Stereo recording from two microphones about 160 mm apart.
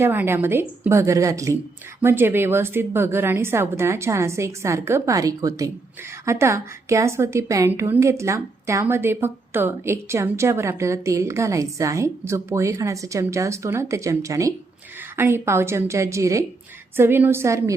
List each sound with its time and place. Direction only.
0.0 s a woman's voice: 15° right (ahead or behind)